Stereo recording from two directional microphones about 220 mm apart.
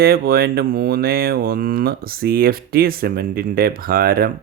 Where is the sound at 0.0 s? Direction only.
45° right (ahead or behind).